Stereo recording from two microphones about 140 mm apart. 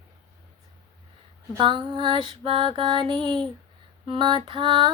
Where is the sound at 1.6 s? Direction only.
35° right (ahead or behind).